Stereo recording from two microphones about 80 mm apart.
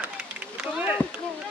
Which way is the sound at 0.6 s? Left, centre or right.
Centre.